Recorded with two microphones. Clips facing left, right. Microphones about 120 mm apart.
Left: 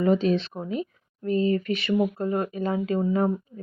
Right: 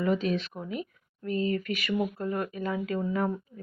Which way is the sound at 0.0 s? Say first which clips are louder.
Left 6 dB; 30° left (ahead or behind).